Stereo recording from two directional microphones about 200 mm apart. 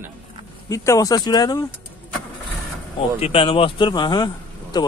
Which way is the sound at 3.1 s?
30° left (ahead or behind).